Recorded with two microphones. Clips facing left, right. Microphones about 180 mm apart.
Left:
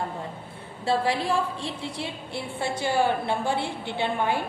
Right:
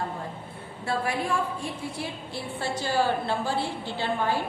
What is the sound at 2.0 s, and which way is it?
A woman's voice, 20° left (ahead or behind).